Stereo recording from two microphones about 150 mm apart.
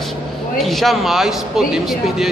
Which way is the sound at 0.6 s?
Centre (ahead or behind).